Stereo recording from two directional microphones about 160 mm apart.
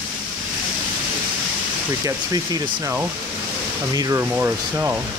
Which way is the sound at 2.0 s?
20° right (ahead or behind).